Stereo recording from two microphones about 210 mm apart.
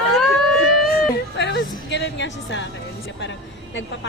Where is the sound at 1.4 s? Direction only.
55° left (ahead or behind).